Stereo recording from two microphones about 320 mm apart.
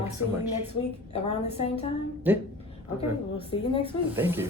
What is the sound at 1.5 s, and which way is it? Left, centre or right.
Speech, centre.